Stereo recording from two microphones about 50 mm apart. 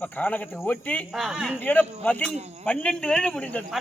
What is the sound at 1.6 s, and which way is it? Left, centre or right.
A man's voice, left.